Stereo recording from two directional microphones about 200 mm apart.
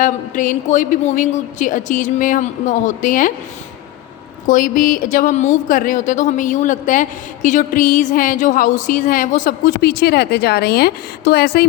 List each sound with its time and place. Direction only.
0.0 s a woman's voice: 40° left (ahead or behind)
4.4 s a woman's voice: 40° left (ahead or behind)